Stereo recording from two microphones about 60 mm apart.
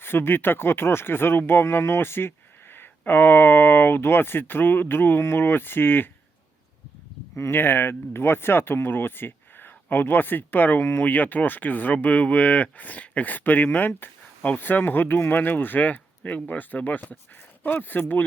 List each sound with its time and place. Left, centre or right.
0.0 s speech: left
7.5 s speech: left